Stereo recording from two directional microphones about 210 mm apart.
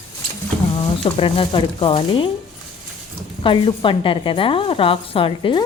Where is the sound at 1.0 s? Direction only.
25° left (ahead or behind).